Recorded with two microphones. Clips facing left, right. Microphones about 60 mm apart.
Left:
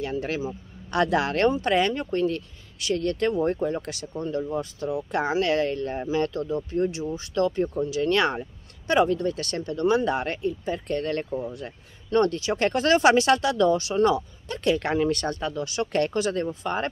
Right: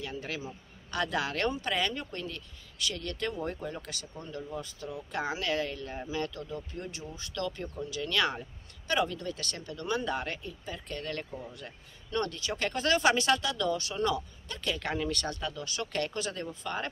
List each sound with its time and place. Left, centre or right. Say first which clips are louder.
0.0 s a man's voice: left 9 dB; left
4.8 s speech: left 8 dB; left